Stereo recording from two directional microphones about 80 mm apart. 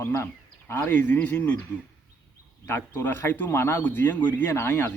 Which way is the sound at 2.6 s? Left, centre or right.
Left.